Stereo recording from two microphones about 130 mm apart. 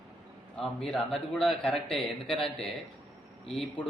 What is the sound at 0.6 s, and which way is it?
A man's voice, 5° left (ahead or behind).